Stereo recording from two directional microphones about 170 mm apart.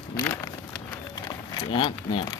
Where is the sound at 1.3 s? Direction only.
25° left (ahead or behind).